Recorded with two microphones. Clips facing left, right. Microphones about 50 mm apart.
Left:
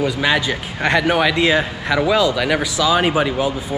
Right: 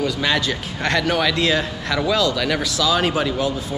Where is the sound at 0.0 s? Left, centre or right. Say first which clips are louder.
Left 3 dB; centre.